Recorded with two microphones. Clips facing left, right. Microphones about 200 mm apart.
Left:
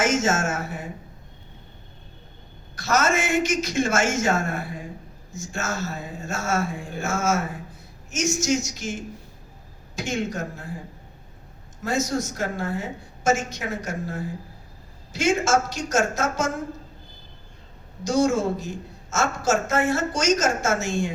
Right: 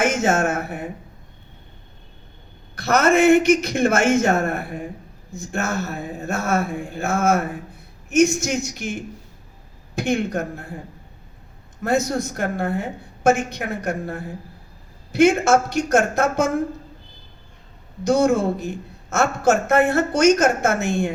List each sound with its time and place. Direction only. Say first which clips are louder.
0.0 s speech: right 3 dB; 60° right (ahead or behind)
2.7 s a woman's voice: right 6 dB; 60° right (ahead or behind)
11.8 s a woman's voice: right 4 dB; 60° right (ahead or behind)
18.0 s a woman's voice: right 4 dB; 60° right (ahead or behind)